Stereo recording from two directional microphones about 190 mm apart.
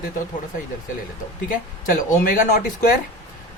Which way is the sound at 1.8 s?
45° left (ahead or behind).